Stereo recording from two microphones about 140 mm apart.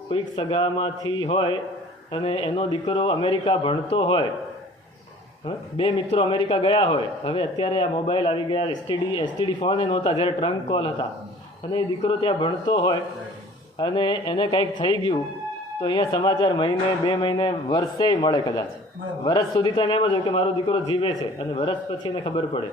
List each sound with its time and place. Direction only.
0.1 s a man's voice: 40° left (ahead or behind)
5.5 s a man's voice: 35° left (ahead or behind)